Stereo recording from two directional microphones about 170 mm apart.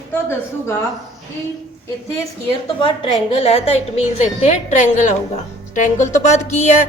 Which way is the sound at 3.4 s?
35° left (ahead or behind).